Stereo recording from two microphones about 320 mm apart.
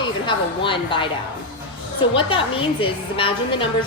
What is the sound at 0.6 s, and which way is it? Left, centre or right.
Speech, centre.